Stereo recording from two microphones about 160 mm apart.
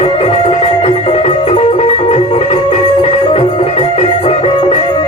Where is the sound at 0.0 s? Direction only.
40° left (ahead or behind).